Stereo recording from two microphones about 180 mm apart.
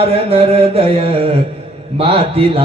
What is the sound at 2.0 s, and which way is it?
Music, 30° right (ahead or behind).